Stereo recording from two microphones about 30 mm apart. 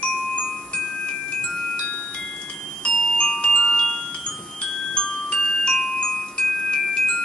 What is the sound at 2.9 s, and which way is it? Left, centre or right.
Music, centre.